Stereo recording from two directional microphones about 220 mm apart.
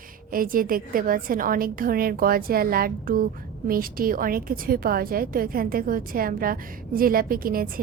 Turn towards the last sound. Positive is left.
turn(degrees=-40)  # may be behind; listen again after turning